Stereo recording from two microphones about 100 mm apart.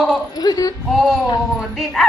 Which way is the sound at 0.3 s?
40° left (ahead or behind).